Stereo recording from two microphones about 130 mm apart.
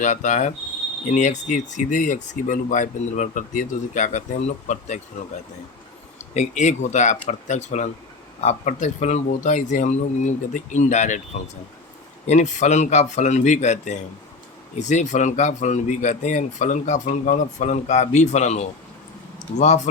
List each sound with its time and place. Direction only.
0.0 s speech: 70° left (ahead or behind)
6.1 s a man's voice: 65° left (ahead or behind)
12.2 s a man's voice: 65° left (ahead or behind)